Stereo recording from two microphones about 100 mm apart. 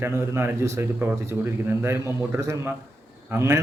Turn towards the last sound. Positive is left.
turn(degrees=-25)  # may be behind; listen again after turning